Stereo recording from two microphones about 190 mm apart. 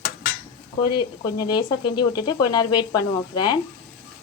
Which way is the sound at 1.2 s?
20° left (ahead or behind).